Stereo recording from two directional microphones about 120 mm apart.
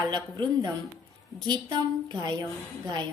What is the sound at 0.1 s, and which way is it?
A woman's voice, 40° right (ahead or behind).